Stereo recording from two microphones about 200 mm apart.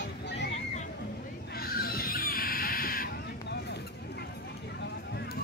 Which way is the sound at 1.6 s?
50° left (ahead or behind).